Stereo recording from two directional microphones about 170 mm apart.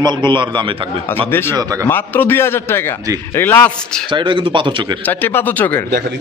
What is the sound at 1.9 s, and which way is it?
Speech, 10° left (ahead or behind).